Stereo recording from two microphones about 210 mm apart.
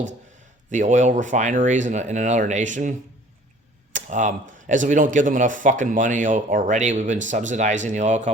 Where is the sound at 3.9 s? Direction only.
35° right (ahead or behind).